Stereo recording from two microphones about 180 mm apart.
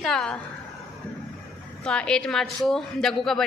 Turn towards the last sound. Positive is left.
turn(degrees=0)  # may be behind; listen again after turning